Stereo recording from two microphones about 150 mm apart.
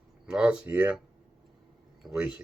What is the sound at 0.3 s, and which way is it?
Speech, 5° right (ahead or behind).